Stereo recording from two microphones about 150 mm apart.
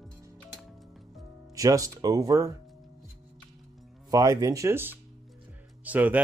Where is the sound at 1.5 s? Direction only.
20° right (ahead or behind).